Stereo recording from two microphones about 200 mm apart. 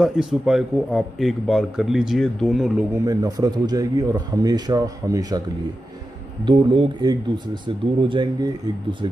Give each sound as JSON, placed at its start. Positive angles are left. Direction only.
{"t": 0.0, "sound": "speech", "side_deg": -5}
{"t": 2.9, "sound": "a man's voice", "side_deg": -15}
{"t": 6.4, "sound": "a man's voice", "side_deg": -25}